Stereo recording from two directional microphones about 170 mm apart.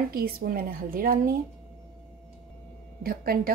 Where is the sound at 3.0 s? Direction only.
60° right (ahead or behind).